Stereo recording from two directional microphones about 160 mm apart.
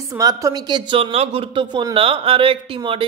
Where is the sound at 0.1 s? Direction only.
20° right (ahead or behind).